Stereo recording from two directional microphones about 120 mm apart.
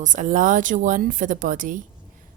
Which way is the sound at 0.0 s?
90° right.